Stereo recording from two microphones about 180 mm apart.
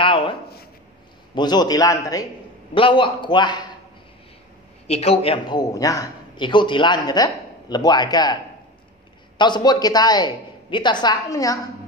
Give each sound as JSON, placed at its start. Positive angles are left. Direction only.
{"t": 0.0, "sound": "a sound", "side_deg": 30}
{"t": 1.3, "sound": "a man's voice", "side_deg": 25}
{"t": 4.8, "sound": "a man's voice", "side_deg": 35}
{"t": 9.4, "sound": "a man's voice", "side_deg": 25}